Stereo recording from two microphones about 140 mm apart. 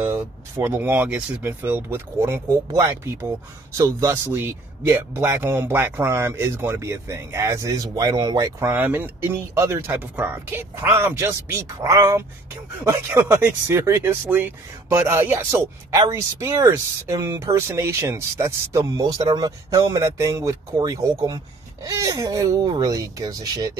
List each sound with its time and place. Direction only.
0.0 s speech: 15° right (ahead or behind)